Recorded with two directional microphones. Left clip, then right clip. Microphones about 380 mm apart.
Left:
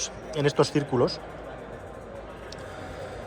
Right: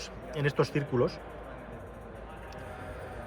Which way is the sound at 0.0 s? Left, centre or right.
Centre.